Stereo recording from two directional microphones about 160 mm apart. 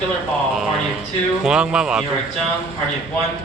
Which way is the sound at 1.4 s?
5° right (ahead or behind).